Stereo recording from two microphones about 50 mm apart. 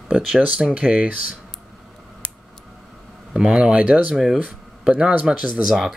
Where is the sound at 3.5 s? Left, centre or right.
Right.